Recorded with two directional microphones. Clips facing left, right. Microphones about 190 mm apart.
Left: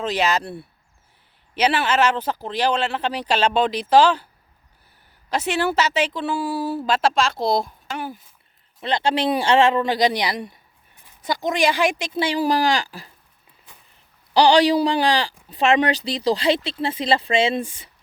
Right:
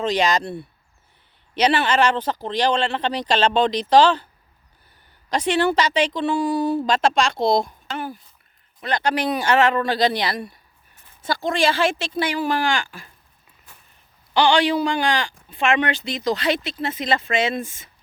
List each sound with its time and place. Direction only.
0.0 s speech: 5° left (ahead or behind)
5.3 s speech: 5° left (ahead or behind)
8.8 s speech: 25° left (ahead or behind)
12.2 s speech: 35° left (ahead or behind)
14.3 s speech: 40° left (ahead or behind)